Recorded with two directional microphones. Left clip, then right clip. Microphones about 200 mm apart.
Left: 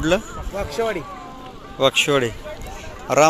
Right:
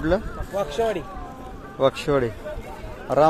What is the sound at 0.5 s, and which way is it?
Speech, 40° left (ahead or behind).